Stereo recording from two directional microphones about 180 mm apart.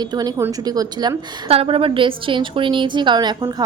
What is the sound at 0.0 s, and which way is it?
A woman's voice, 20° right (ahead or behind).